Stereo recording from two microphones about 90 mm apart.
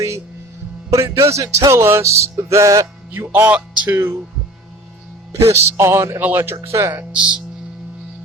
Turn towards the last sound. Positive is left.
turn(degrees=-10)  # may be behind; listen again after turning